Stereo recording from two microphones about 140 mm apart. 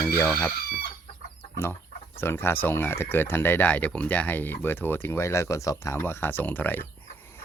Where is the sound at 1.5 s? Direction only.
20° left (ahead or behind).